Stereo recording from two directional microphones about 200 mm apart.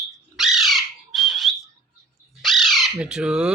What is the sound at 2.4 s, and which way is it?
Bird, centre (ahead or behind).